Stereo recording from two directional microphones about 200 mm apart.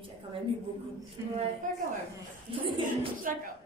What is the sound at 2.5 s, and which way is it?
Speech, 25° right (ahead or behind).